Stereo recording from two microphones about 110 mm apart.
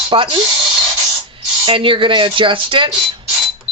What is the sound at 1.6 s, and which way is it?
Speech, 50° right (ahead or behind).